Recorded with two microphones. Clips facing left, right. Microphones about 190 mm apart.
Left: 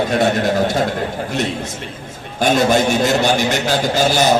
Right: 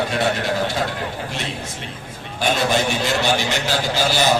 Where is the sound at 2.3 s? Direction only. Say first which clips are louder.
Left 5 dB; 45° left (ahead or behind).